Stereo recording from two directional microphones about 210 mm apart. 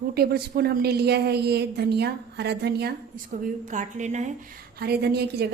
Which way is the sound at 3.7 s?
35° right (ahead or behind).